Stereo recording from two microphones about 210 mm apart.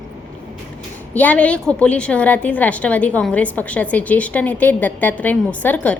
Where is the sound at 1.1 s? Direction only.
5° left (ahead or behind).